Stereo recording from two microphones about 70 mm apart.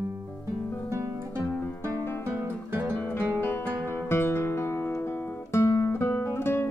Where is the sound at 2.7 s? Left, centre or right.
Right.